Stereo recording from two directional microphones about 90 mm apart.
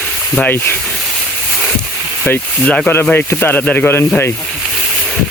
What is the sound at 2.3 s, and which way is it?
Speech, 25° left (ahead or behind).